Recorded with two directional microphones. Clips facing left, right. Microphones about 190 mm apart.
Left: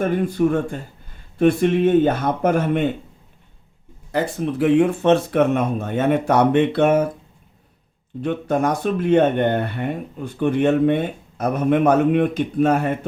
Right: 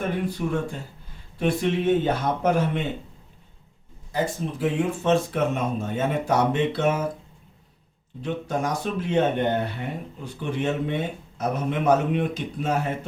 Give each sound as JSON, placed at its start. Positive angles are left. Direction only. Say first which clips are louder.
{"t": 0.0, "sound": "speech", "louder": "left 8 dB", "side_deg": 55}
{"t": 4.1, "sound": "speech", "louder": "left 5 dB", "side_deg": 65}
{"t": 8.2, "sound": "speech", "louder": "left 7 dB", "side_deg": 55}